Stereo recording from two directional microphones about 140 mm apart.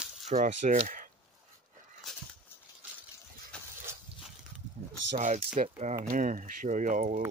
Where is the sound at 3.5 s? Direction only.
5° left (ahead or behind).